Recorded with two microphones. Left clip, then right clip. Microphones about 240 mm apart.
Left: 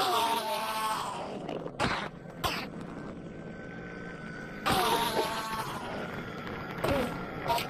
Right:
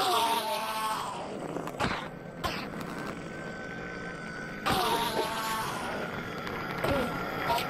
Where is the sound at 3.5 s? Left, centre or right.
Centre.